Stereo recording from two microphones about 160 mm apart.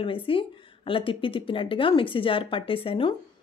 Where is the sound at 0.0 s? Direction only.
35° left (ahead or behind).